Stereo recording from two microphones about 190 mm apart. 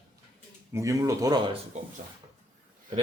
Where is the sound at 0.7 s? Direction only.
15° right (ahead or behind).